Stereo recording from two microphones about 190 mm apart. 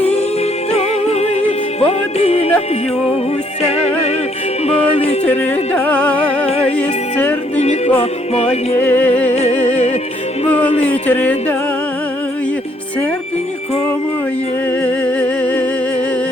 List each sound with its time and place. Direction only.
0.0 s music: 35° left (ahead or behind)
3.6 s music: 35° left (ahead or behind)
5.2 s music: 10° left (ahead or behind)
7.5 s music: 35° left (ahead or behind)
8.8 s music: 10° left (ahead or behind)
9.3 s music: 35° left (ahead or behind)
10.7 s a sound: 30° left (ahead or behind)
11.0 s music: 10° left (ahead or behind)
14.7 s music: 10° left (ahead or behind)